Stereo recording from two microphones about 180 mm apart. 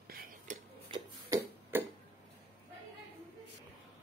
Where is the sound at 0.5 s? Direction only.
45° right (ahead or behind).